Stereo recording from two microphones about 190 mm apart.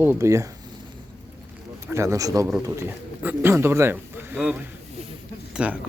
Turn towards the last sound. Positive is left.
turn(degrees=-5)  # may be behind; listen again after turning